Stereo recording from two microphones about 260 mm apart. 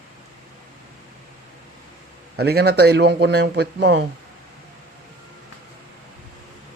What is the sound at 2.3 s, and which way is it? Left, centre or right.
Speech, right.